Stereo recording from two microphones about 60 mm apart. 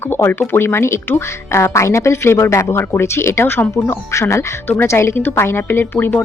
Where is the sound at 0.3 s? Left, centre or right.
Left.